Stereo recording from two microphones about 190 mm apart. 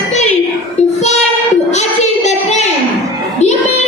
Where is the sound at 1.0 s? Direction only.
35° left (ahead or behind).